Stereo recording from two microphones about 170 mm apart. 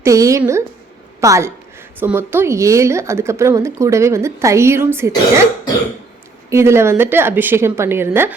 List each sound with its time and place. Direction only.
0.0 s speech: 20° right (ahead or behind)
6.5 s speech: 15° right (ahead or behind)